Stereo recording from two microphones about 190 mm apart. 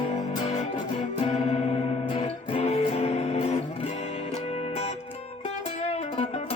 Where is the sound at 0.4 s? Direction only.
30° left (ahead or behind).